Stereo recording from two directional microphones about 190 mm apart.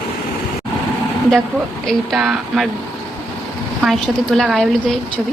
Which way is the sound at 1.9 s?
Centre (ahead or behind).